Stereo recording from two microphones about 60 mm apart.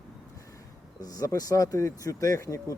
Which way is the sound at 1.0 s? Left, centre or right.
Left.